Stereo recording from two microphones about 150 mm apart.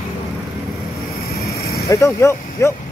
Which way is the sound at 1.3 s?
90° left.